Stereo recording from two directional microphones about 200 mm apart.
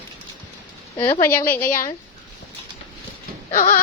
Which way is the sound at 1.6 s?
45° left (ahead or behind).